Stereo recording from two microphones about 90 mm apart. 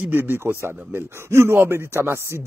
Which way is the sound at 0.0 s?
20° right (ahead or behind).